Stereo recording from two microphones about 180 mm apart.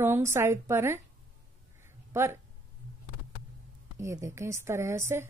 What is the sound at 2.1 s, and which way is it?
Speech, 15° right (ahead or behind).